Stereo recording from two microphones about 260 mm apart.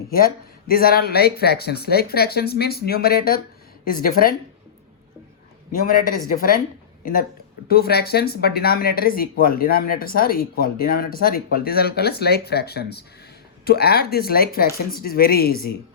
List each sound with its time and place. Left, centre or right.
0.1 s speech: left
5.8 s speech: left